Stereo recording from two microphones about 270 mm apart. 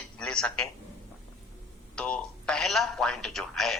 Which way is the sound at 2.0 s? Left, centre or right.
Centre.